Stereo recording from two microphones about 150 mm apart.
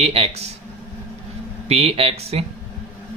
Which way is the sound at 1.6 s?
40° right (ahead or behind).